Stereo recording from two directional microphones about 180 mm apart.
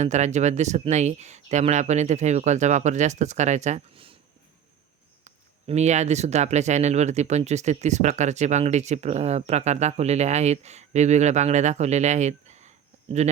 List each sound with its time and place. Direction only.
0.0 s speech: 40° right (ahead or behind)
5.2 s speech: 40° right (ahead or behind)